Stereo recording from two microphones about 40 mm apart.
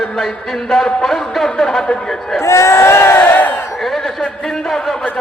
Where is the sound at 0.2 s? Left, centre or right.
Centre.